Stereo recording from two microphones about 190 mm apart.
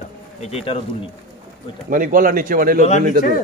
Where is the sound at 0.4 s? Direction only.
35° left (ahead or behind).